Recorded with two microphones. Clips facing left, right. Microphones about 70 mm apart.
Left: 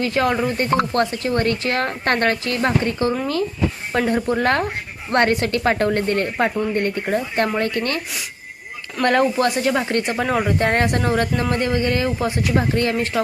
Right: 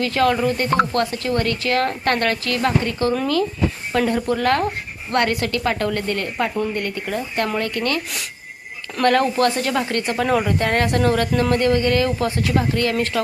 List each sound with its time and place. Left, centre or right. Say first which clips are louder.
0.0 s speech: right 1 dB; left
9.0 s speech: even; left
10.6 s speech: even; left